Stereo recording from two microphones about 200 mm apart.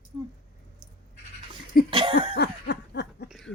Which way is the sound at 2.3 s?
55° left (ahead or behind).